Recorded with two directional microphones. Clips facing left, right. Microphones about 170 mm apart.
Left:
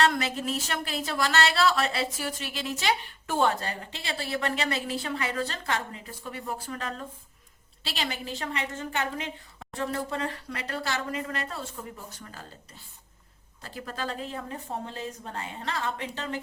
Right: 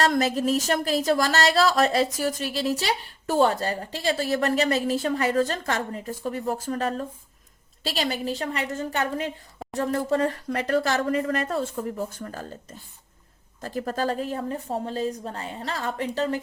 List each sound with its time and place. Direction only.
0.0 s speech: 40° right (ahead or behind)